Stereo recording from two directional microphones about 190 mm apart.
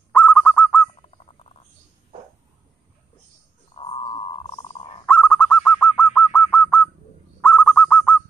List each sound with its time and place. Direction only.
0.1 s bird: 5° left (ahead or behind)
3.7 s a sound: 30° left (ahead or behind)
5.0 s bird: 5° left (ahead or behind)